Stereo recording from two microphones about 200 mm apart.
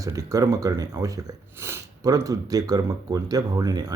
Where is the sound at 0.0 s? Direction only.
15° right (ahead or behind).